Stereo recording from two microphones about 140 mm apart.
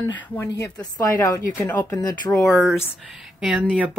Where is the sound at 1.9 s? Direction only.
25° left (ahead or behind).